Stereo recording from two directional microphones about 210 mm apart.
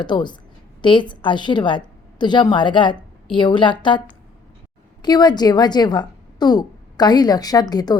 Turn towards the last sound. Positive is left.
turn(degrees=20)  # may be behind; listen again after turning